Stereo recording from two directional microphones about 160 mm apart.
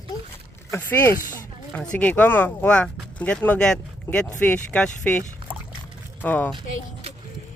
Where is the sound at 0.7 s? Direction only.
10° left (ahead or behind).